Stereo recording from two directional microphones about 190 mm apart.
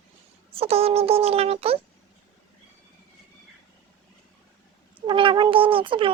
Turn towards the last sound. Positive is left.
turn(degrees=-25)  # may be behind; listen again after turning